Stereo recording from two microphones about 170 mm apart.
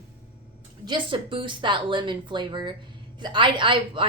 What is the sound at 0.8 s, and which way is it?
A woman's voice, 25° right (ahead or behind).